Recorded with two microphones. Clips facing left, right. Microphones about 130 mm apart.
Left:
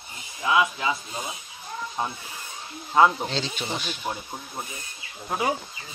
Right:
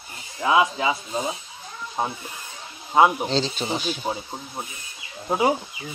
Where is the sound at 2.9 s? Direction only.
15° right (ahead or behind).